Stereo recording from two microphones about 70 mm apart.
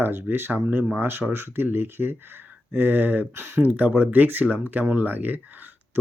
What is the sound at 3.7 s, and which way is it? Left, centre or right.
Speech, right.